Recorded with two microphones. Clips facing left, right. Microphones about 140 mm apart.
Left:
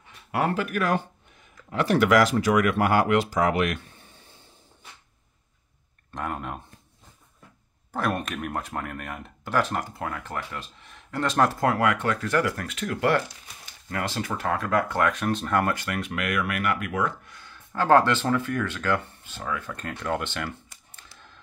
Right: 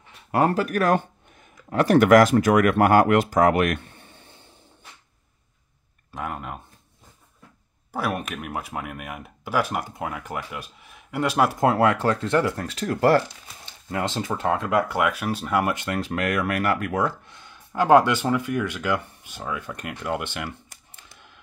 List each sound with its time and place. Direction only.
0.3 s speech: 40° right (ahead or behind); by 4.4 s 65° right (ahead or behind)
6.1 s speech: centre (ahead or behind)
7.9 s speech: 5° right (ahead or behind)
11.6 s speech: 30° right (ahead or behind)
13.8 s speech: 20° right (ahead or behind)
14.8 s speech: 10° right (ahead or behind)
15.7 s speech: 25° right (ahead or behind)
16.1 s speech: 35° right (ahead or behind)
17.3 s speech: 20° right (ahead or behind)